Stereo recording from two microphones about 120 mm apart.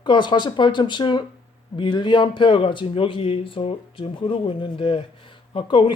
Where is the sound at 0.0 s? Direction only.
40° left (ahead or behind).